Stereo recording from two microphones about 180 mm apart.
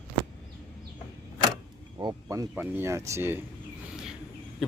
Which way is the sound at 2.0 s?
20° right (ahead or behind).